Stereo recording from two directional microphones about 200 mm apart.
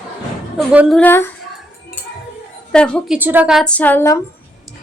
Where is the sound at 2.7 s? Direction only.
5° left (ahead or behind).